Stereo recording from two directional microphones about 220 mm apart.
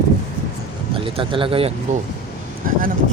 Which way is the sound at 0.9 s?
25° right (ahead or behind).